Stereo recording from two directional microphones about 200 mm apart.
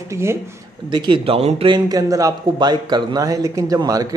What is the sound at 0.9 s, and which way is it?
Speech, 25° right (ahead or behind).